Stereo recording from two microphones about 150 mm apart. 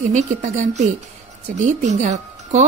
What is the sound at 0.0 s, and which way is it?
Speech, 55° right (ahead or behind).